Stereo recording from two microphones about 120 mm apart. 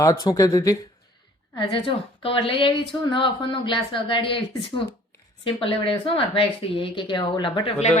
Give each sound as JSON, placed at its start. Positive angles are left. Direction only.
{"t": 0.0, "sound": "speech", "side_deg": 30}
{"t": 1.5, "sound": "a woman's voice", "side_deg": 45}